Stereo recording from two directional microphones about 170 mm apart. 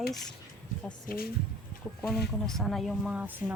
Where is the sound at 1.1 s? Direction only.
55° left (ahead or behind).